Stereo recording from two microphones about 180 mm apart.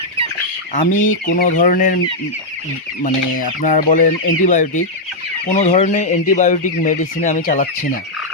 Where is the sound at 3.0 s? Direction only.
45° left (ahead or behind).